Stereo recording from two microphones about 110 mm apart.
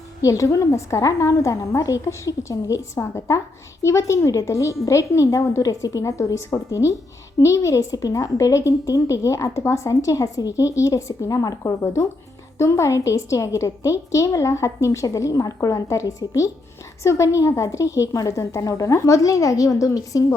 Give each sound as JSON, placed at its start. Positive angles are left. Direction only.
{"t": 0.2, "sound": "a woman's voice", "side_deg": 30}